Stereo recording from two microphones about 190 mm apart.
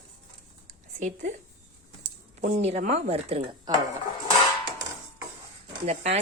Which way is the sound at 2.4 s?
35° right (ahead or behind).